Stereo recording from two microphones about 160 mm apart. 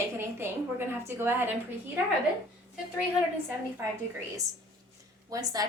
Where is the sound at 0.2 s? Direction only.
15° right (ahead or behind).